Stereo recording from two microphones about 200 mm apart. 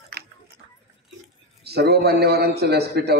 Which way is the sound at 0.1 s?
60° right (ahead or behind).